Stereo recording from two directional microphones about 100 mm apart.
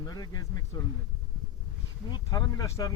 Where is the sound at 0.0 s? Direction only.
40° left (ahead or behind).